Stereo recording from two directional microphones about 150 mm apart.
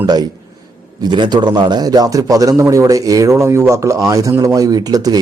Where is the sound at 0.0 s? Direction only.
25° right (ahead or behind).